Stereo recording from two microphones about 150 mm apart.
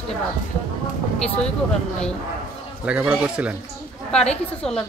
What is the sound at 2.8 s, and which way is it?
Speech, 10° right (ahead or behind).